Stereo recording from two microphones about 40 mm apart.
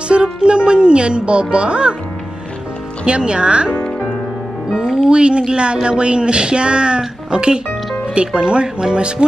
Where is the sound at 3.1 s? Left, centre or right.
Right.